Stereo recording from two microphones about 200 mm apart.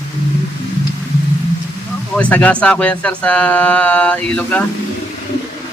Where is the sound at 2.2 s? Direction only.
5° left (ahead or behind).